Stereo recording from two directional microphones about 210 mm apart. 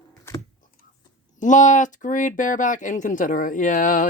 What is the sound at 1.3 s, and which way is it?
Speech, 35° left (ahead or behind).